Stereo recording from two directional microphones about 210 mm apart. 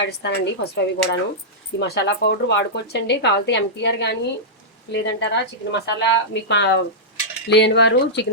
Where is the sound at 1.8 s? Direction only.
55° left (ahead or behind).